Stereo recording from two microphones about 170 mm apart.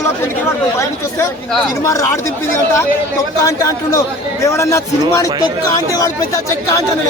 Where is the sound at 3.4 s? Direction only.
20° left (ahead or behind).